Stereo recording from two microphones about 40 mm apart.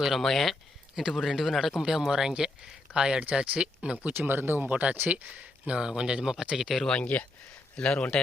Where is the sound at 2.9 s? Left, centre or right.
Right.